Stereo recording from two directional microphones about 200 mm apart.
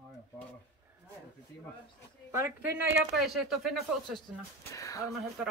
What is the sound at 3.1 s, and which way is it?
Speech, centre (ahead or behind).